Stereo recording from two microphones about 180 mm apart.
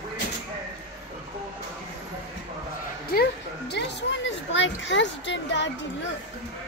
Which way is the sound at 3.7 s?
75° left (ahead or behind).